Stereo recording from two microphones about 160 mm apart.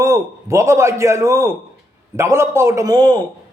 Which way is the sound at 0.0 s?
20° right (ahead or behind).